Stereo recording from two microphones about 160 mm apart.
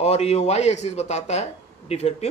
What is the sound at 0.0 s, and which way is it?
Speech, 40° left (ahead or behind).